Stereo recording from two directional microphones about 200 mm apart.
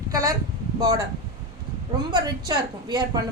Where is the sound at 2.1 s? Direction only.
20° right (ahead or behind).